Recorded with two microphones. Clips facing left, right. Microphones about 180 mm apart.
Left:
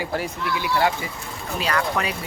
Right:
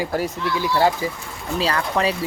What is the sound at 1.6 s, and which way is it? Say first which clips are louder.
Speech: right 2 dB; 30° right (ahead or behind).